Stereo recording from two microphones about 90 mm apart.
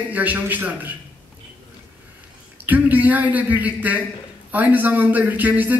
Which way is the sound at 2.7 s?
20° right (ahead or behind).